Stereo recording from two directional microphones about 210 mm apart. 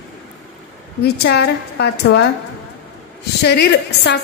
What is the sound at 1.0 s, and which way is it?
A woman's voice, 50° left (ahead or behind).